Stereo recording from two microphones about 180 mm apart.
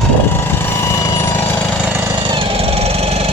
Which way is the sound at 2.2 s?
25° right (ahead or behind).